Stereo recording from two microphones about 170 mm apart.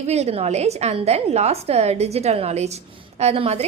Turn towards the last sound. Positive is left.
turn(degrees=-40)  # may be behind; listen again after turning